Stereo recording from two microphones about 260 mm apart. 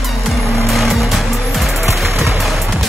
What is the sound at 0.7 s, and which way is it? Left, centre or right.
Music, centre.